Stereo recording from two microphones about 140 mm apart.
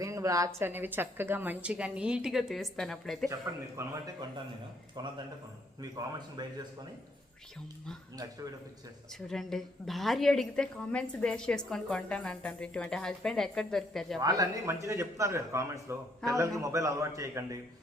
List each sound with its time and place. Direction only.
0.0 s speech: 25° right (ahead or behind); by 3.2 s centre (ahead or behind)
3.8 s a man's voice: 25° right (ahead or behind)
9.2 s a woman's voice: 5° left (ahead or behind)
14.2 s a man's voice: 25° right (ahead or behind)